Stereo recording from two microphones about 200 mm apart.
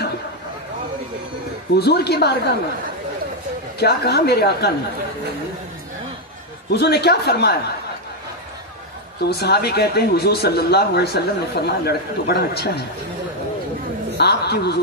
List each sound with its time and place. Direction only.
1.8 s speech: 55° left (ahead or behind)
3.8 s speech: 55° left (ahead or behind)
6.7 s speech: 55° left (ahead or behind)
9.2 s speech: 55° left (ahead or behind)
14.1 s speech: 55° left (ahead or behind)